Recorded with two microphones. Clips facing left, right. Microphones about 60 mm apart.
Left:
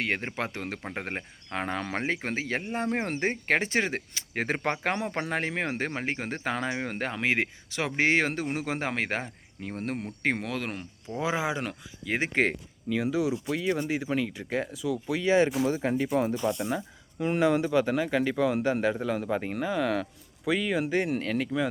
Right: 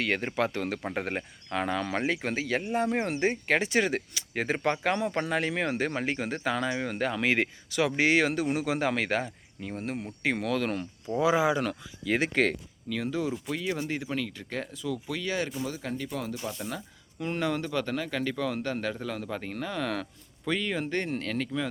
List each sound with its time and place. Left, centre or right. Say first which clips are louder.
0.0 s speech: right 2 dB; left
1.5 s speech: right 2 dB; left
4.4 s speech: right 2 dB; left
7.2 s speech: left 2 dB; left
10.3 s speech: right 4 dB; left
13.0 s speech: left 3 dB; centre
14.9 s speech: left 9 dB; centre
16.6 s speech: left 6 dB; centre